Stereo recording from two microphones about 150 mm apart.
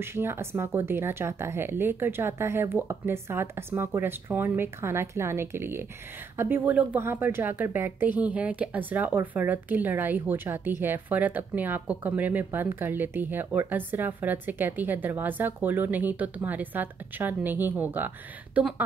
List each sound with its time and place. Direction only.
0.0 s speech: 15° right (ahead or behind)